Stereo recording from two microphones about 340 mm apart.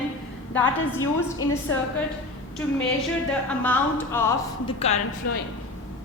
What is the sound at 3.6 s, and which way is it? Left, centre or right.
A woman's voice, centre.